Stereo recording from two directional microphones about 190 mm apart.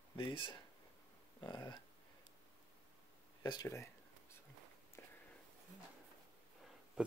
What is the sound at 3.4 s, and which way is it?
Speech, 20° left (ahead or behind).